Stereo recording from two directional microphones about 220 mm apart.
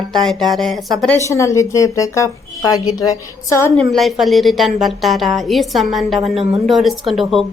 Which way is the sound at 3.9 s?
Centre (ahead or behind).